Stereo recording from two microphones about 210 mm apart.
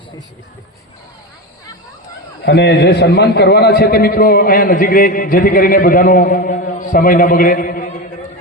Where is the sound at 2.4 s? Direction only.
55° left (ahead or behind); by 8.0 s 35° left (ahead or behind).